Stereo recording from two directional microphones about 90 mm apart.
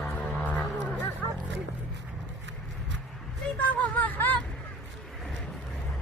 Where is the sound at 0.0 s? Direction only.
15° left (ahead or behind).